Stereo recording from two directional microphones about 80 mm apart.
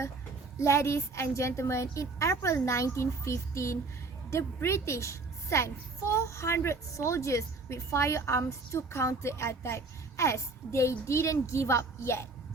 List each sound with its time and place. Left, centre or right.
0.6 s a child's voice: left